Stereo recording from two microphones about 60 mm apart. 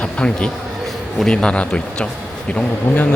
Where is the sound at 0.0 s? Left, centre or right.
Centre.